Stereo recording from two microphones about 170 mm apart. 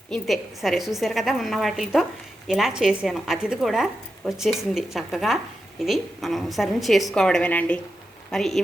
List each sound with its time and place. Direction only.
0.1 s a woman's voice: centre (ahead or behind)